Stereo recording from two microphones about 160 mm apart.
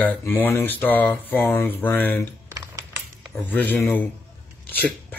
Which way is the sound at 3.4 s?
10° left (ahead or behind).